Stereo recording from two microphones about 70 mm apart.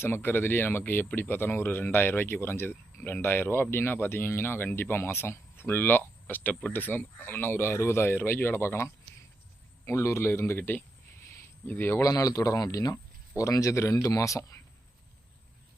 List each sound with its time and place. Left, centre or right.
0.0 s speech: left
12.0 s speech: left